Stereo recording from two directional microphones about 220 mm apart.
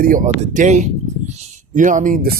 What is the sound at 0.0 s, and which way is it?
Speech, 35° right (ahead or behind).